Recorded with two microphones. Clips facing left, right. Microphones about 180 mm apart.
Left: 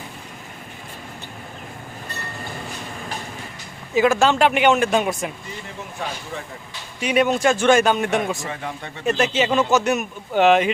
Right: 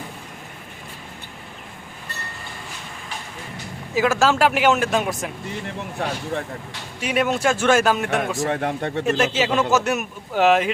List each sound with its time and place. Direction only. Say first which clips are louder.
3.9 s speech: left 2 dB; 5° right (ahead or behind)
5.6 s speech: right 3 dB; 60° right (ahead or behind)
7.0 s speech: left 3 dB; centre (ahead or behind)
8.4 s speech: right 7 dB; 60° right (ahead or behind)
9.3 s speech: left 1 dB; 5° right (ahead or behind)